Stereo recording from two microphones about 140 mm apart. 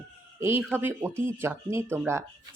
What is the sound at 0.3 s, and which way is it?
Speech, 20° right (ahead or behind).